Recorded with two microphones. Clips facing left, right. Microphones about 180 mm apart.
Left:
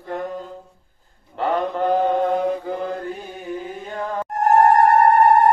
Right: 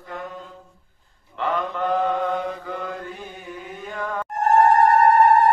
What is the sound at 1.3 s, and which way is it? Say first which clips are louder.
Mantra: left 4 dB; 35° left (ahead or behind).